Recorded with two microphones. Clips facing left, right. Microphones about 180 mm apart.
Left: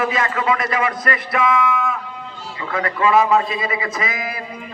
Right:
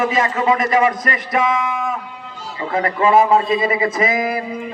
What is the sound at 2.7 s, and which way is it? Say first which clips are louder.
A man's voice: right 2 dB; 30° right (ahead or behind).